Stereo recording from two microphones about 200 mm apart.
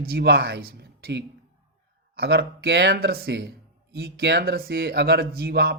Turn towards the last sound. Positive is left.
turn(degrees=-50)  # may be behind; listen again after turning